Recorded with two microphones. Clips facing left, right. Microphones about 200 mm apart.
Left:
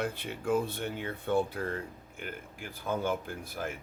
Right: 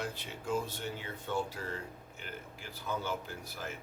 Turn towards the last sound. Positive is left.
turn(degrees=55)  # may be behind; listen again after turning